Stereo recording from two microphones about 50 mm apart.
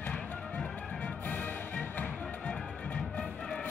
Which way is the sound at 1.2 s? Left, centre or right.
Left.